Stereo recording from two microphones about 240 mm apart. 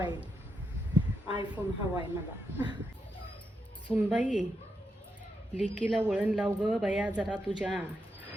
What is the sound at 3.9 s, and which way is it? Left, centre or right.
Speech, centre.